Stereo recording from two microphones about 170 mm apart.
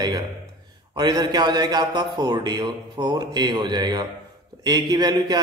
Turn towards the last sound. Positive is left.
turn(degrees=-25)  # may be behind; listen again after turning